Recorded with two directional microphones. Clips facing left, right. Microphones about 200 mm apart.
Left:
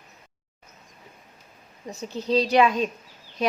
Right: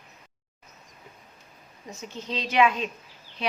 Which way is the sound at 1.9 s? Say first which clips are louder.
Left 10 dB; 35° left (ahead or behind).